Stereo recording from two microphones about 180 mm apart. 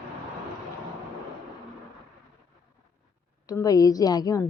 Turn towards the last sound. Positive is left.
turn(degrees=20)  # may be behind; listen again after turning